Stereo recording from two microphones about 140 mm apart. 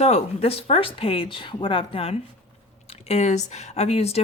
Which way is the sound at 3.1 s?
55° left (ahead or behind).